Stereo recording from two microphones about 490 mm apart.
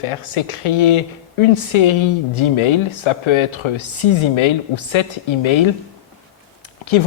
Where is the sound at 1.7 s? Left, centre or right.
Left.